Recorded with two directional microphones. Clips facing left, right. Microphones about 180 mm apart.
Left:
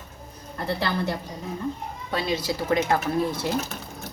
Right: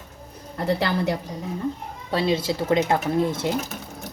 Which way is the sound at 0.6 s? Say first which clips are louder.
Right 4 dB; 85° right.